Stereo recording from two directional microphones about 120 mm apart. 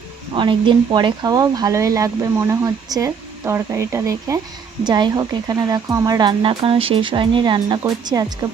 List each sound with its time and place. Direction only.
0.3 s speech: 40° right (ahead or behind); by 4.4 s 25° right (ahead or behind)
4.8 s speech: 40° right (ahead or behind)